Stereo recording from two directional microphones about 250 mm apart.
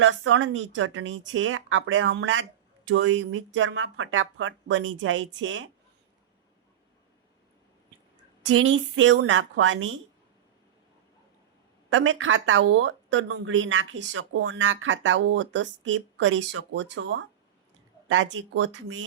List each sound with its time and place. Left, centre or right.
0.0 s speech: right
8.4 s speech: right
11.9 s speech: right